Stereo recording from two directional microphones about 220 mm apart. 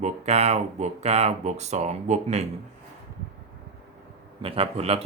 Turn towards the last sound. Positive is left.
turn(degrees=-30)  # may be behind; listen again after turning